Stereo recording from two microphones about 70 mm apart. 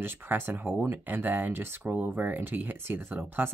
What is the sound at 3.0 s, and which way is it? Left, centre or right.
Speech, right.